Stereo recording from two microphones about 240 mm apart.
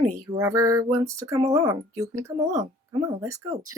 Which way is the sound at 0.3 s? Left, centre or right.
Centre.